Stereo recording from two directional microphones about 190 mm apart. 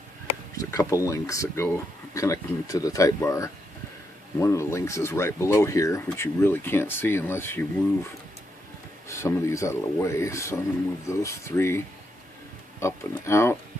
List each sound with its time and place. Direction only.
0.6 s a sound: 15° left (ahead or behind)
1.0 s speech: 15° left (ahead or behind)
9.1 s speech: 15° left (ahead or behind)
12.8 s speech: 15° left (ahead or behind)